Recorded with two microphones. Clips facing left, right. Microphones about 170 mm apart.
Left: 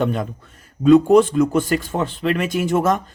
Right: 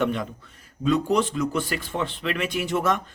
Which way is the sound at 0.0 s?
45° left (ahead or behind).